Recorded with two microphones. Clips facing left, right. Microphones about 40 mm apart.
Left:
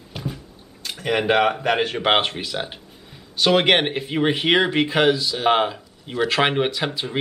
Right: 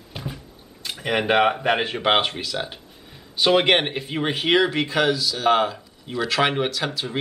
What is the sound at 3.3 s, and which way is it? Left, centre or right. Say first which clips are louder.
Speech: left 1 dB; centre.